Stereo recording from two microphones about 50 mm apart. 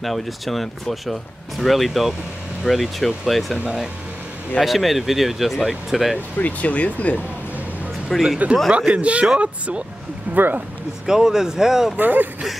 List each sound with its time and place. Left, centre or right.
0.0 s speech: centre
4.6 s speech: centre
6.3 s speech: left
8.1 s speech: centre
8.7 s speech: right
10.3 s speech: right
11.1 s speech: centre
12.0 s speech: right